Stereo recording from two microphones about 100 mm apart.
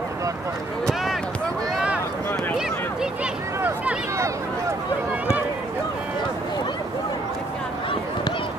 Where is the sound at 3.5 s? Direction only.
20° right (ahead or behind).